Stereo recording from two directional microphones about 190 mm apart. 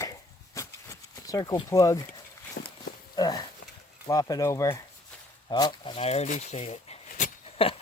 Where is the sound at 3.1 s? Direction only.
20° left (ahead or behind).